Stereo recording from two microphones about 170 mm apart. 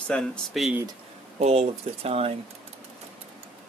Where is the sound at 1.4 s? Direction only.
40° right (ahead or behind).